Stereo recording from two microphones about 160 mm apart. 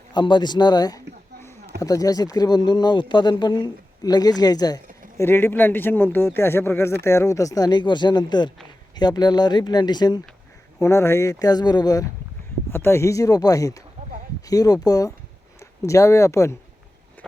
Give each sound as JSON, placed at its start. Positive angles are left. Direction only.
{"t": 0.1, "sound": "a sound", "side_deg": 30}
{"t": 1.8, "sound": "speech", "side_deg": 20}
{"t": 12.7, "sound": "speech", "side_deg": 15}